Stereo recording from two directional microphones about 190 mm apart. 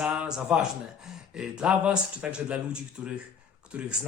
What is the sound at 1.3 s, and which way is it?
Speech, 5° right (ahead or behind).